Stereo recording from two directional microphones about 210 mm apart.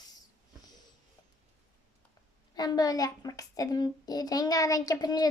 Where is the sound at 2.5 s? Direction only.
20° left (ahead or behind).